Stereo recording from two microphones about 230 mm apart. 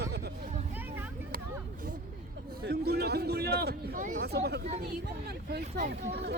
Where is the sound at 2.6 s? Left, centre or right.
Right.